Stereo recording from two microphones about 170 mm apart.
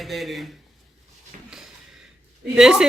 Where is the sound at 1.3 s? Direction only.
50° right (ahead or behind).